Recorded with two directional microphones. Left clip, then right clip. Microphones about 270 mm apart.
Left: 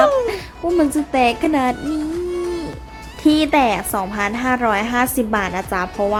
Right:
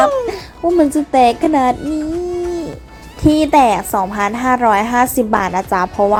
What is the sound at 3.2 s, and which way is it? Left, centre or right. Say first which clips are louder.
A woman's voice: right 4 dB; centre.